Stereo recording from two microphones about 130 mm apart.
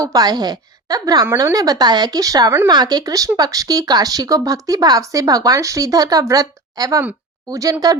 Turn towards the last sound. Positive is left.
turn(degrees=-25)  # may be behind; listen again after turning